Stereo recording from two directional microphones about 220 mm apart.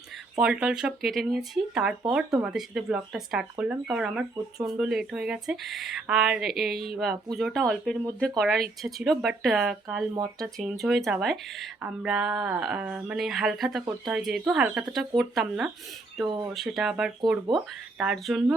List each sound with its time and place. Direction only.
0.3 s speech: 5° right (ahead or behind)